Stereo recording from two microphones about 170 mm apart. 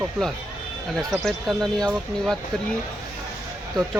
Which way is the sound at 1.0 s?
Centre (ahead or behind).